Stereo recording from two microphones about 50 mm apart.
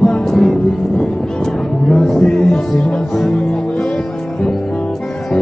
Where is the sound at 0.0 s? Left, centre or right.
Centre.